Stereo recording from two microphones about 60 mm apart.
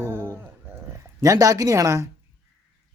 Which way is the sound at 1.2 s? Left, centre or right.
Right.